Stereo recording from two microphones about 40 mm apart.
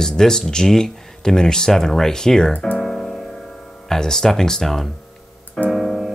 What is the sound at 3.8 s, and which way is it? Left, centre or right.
Speech, centre.